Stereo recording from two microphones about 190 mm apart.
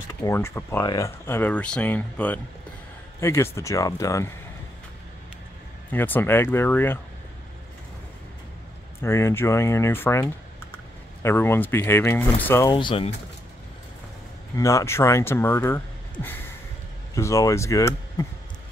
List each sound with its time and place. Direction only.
0.2 s speech: 15° left (ahead or behind)
5.9 s speech: 10° left (ahead or behind)
9.0 s speech: 15° left (ahead or behind)
12.7 s speech: 30° left (ahead or behind)
14.6 s speech: 15° left (ahead or behind)